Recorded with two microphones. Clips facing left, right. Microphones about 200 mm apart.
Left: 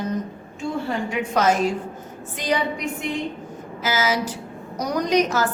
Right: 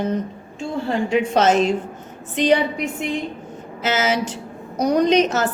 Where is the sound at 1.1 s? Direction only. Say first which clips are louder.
Right 6 dB; 25° right (ahead or behind).